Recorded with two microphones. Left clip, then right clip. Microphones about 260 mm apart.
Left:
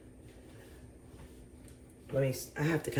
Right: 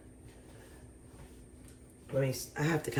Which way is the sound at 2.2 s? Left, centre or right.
Right.